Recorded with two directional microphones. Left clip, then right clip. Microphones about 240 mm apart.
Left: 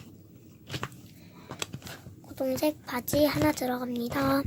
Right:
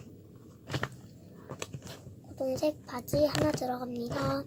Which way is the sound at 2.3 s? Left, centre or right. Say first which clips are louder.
Left 2 dB; left.